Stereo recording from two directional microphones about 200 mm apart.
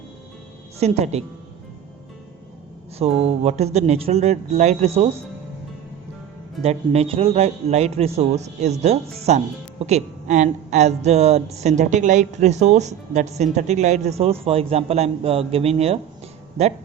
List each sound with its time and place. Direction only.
0.8 s speech: 35° right (ahead or behind)
3.0 s speech: 30° right (ahead or behind)
6.6 s speech: 30° right (ahead or behind)